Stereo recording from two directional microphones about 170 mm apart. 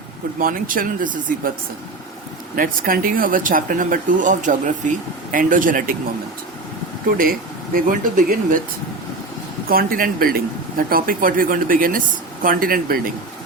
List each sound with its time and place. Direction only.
0.3 s speech: 55° right (ahead or behind)
2.6 s speech: 55° right (ahead or behind)
7.2 s speech: 60° right (ahead or behind)
9.6 s speech: 60° right (ahead or behind)